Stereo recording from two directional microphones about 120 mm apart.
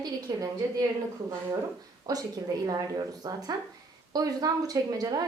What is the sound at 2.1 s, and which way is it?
A woman's voice, 30° right (ahead or behind).